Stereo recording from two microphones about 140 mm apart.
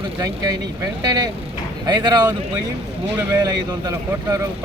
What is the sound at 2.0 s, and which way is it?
Speech, 30° right (ahead or behind).